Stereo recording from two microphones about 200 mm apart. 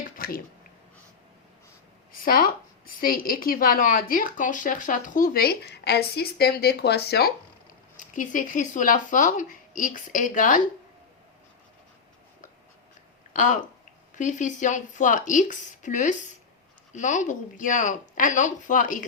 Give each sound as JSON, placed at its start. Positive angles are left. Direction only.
{"t": 0.2, "sound": "speech", "side_deg": 45}
{"t": 2.2, "sound": "a woman's voice", "side_deg": 45}
{"t": 7.9, "sound": "speech", "side_deg": 40}
{"t": 13.3, "sound": "speech", "side_deg": 40}